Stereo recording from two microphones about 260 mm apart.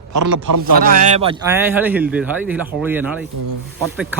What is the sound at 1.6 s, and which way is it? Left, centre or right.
A man's voice, centre.